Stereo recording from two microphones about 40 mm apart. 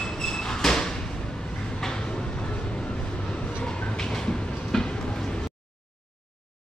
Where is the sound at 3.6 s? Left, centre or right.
Centre.